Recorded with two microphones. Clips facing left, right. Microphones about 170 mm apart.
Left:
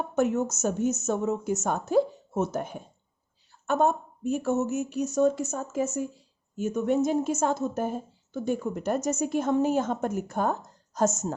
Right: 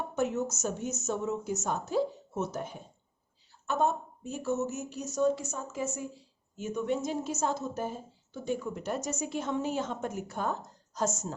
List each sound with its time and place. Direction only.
0.2 s a woman's voice: 50° left (ahead or behind)